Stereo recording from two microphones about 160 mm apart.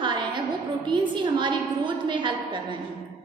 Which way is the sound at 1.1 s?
30° right (ahead or behind).